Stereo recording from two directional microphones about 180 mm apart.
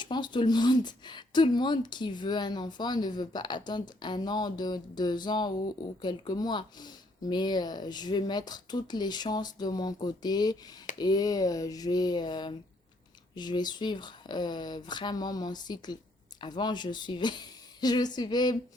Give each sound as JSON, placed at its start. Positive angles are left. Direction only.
{"t": 0.0, "sound": "speech", "side_deg": 25}